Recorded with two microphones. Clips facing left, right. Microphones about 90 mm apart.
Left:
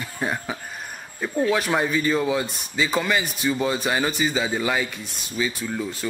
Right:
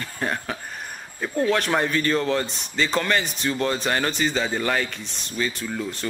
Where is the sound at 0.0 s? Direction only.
10° left (ahead or behind).